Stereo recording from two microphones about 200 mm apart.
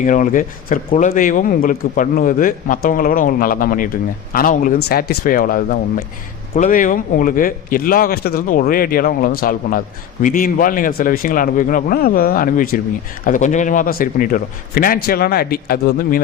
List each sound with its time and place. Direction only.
0.0 s speech: 40° left (ahead or behind)